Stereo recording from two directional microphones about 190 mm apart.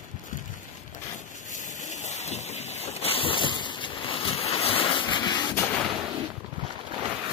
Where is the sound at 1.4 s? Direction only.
40° left (ahead or behind).